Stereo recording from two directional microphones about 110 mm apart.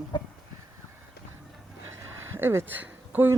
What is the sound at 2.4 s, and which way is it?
Speech, 20° right (ahead or behind).